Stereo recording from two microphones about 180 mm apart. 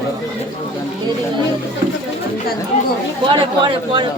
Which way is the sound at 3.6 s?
25° right (ahead or behind).